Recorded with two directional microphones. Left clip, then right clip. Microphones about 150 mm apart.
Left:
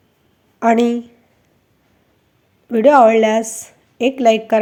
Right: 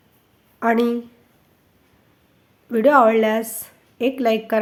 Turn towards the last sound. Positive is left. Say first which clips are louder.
# left 6 dB
turn(degrees=15)  # may be behind; listen again after turning